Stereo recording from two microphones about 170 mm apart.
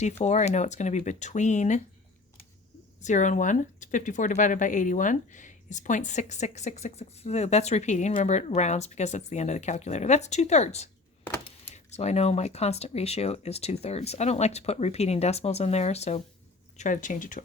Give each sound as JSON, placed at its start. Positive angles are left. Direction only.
{"t": 0.0, "sound": "speech", "side_deg": 40}
{"t": 3.0, "sound": "speech", "side_deg": 45}